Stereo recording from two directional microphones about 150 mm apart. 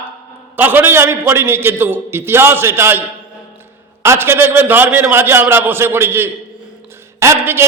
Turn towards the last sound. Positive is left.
turn(degrees=-15)  # may be behind; listen again after turning